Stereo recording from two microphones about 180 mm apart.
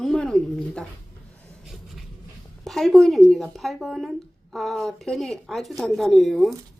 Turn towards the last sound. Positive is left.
turn(degrees=0)  # may be behind; listen again after turning